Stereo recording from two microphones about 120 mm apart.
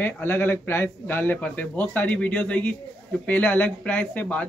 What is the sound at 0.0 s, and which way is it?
A man's voice, 15° left (ahead or behind).